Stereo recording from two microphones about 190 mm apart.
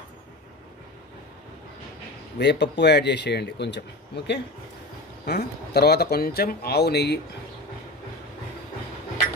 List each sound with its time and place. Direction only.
2.3 s speech: 65° left (ahead or behind)